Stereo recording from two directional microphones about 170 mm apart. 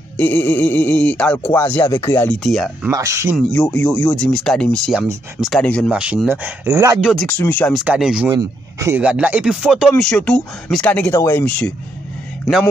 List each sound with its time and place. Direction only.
0.2 s speech: 10° left (ahead or behind)
2.4 s speech: centre (ahead or behind)
2.9 s speech: 20° right (ahead or behind)
3.3 s speech: 5° left (ahead or behind)
5.9 s speech: 5° right (ahead or behind)
7.0 s speech: centre (ahead or behind)
7.2 s speech: 10° left (ahead or behind)
7.7 s speech: 5° right (ahead or behind)
8.3 s speech: 20° right (ahead or behind); by 11.7 s 5° left (ahead or behind)